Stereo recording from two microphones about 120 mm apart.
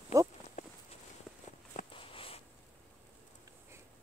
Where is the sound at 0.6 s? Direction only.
70° left (ahead or behind).